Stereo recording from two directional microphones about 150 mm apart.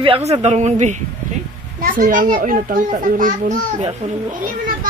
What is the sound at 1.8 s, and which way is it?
A child's voice, 70° right (ahead or behind).